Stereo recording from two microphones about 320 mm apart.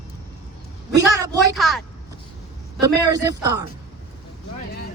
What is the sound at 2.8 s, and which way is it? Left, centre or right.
Speech, centre.